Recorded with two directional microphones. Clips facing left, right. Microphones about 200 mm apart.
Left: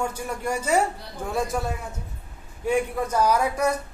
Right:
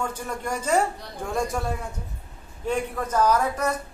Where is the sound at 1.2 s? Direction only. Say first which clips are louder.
Even; 5° left (ahead or behind).